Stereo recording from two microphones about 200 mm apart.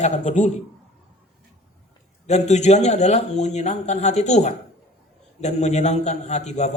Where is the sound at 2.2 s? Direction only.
35° left (ahead or behind).